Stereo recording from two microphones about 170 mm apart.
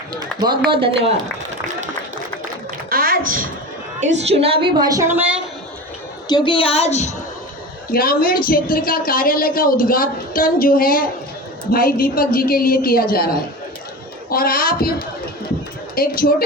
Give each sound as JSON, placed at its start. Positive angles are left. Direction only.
{"t": 0.2, "sound": "a woman's voice", "side_deg": -25}
{"t": 2.9, "sound": "a sound", "side_deg": -60}
{"t": 4.0, "sound": "a woman's voice", "side_deg": -40}
{"t": 6.2, "sound": "a woman's voice", "side_deg": 25}
{"t": 7.9, "sound": "a woman's voice", "side_deg": 55}